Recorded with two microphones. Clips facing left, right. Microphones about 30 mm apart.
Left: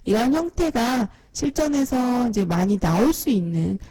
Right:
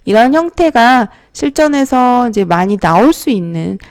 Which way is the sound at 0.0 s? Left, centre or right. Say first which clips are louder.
Right 11 dB; right.